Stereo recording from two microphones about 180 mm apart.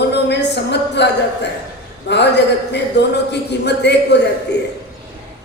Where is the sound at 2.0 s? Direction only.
70° left (ahead or behind).